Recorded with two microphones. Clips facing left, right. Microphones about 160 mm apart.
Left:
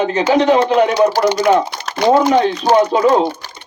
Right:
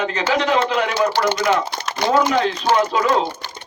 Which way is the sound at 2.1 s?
30° left (ahead or behind).